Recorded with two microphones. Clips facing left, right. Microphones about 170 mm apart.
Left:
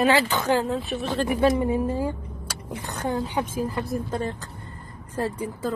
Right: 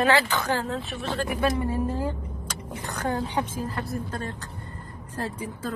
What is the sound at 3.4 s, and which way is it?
Speech, 10° left (ahead or behind).